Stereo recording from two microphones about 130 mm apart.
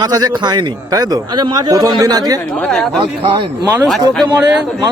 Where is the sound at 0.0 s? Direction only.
30° right (ahead or behind).